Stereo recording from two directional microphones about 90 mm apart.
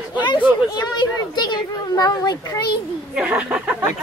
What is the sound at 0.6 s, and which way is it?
A child's voice, 50° left (ahead or behind).